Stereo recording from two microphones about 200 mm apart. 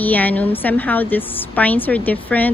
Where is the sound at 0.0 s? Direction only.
10° left (ahead or behind).